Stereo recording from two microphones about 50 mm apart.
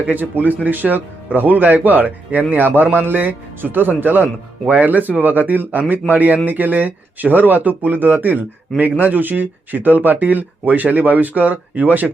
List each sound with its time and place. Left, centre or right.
0.0 s speech: right